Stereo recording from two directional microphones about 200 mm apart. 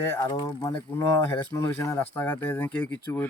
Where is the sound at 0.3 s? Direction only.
20° left (ahead or behind).